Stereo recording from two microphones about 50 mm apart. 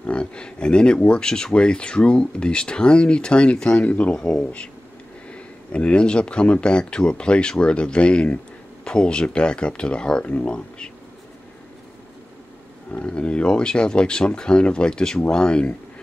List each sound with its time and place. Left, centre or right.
0.1 s speech: centre
3.8 s speech: left
4.1 s speech: centre
13.0 s speech: left